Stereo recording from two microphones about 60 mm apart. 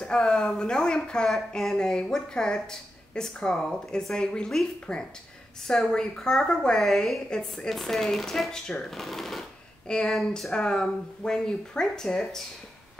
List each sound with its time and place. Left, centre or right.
0.0 s speech: centre